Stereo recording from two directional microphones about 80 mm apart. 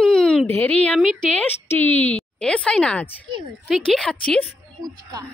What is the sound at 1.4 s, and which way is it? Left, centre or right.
Speech, left.